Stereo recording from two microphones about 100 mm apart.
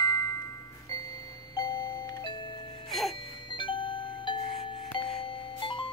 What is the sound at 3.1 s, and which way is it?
Music, 55° left (ahead or behind).